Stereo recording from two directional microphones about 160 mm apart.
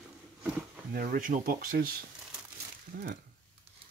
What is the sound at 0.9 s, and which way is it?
Speech, 65° right (ahead or behind).